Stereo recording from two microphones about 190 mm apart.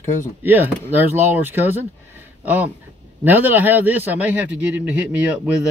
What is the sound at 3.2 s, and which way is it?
A man's voice, 10° right (ahead or behind).